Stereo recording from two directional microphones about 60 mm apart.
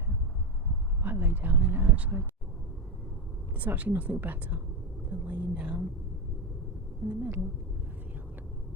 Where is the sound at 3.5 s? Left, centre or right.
Right.